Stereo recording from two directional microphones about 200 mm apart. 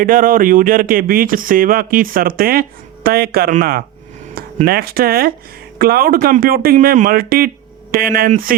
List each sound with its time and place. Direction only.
0.0 s speech: 45° right (ahead or behind)